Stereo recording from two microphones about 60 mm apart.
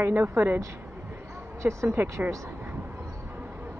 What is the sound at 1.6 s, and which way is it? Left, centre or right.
Speech, right.